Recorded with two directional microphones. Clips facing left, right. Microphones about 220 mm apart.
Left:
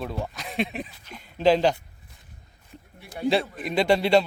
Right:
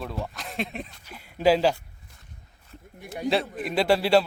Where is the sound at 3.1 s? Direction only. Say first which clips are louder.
Left 2 dB; centre (ahead or behind).